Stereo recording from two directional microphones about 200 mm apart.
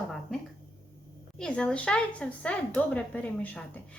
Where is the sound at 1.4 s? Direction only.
5° left (ahead or behind).